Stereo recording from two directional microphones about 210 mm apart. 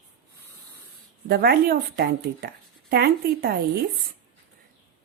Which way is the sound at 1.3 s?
50° right (ahead or behind).